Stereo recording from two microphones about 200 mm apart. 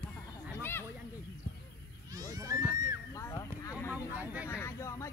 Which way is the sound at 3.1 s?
15° left (ahead or behind).